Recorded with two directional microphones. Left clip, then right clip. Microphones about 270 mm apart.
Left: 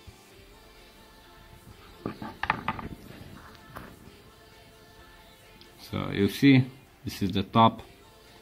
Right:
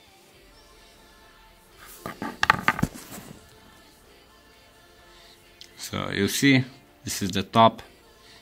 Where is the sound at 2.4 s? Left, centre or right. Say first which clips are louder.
Right 8 dB; right.